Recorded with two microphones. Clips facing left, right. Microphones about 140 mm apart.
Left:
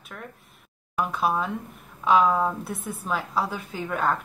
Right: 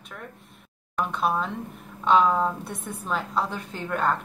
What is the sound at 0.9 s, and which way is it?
A woman's voice, 5° left (ahead or behind).